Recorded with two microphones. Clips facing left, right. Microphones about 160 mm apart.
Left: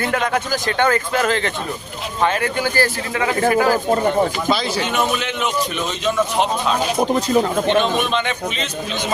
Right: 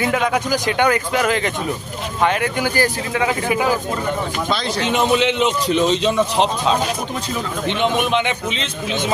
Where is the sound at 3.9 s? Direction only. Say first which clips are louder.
Left 6 dB; 40° left (ahead or behind).